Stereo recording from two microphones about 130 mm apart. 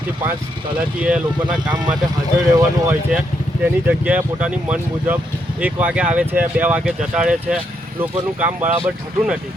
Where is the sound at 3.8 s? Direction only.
10° right (ahead or behind).